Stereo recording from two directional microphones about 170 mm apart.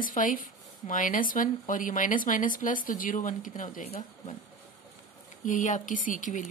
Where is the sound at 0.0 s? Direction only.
50° left (ahead or behind).